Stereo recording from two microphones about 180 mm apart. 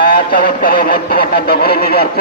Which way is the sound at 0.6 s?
60° left (ahead or behind).